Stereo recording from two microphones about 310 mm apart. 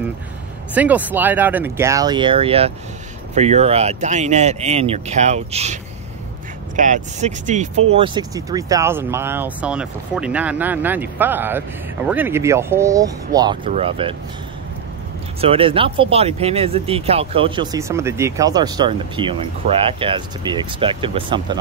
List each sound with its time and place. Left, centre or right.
0.7 s speech: centre; by 5.8 s right
6.8 s speech: right
15.4 s speech: centre